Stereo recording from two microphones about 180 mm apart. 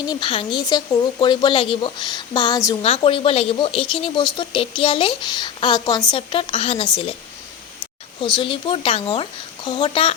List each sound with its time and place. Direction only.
0.0 s speech: 25° left (ahead or behind)
8.2 s speech: 30° left (ahead or behind)